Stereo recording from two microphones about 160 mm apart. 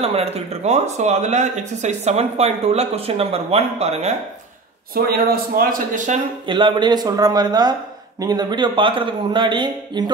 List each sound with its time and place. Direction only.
0.0 s speech: 40° right (ahead or behind)
4.9 s a man's voice: 70° right (ahead or behind)
6.4 s speech: 30° right (ahead or behind)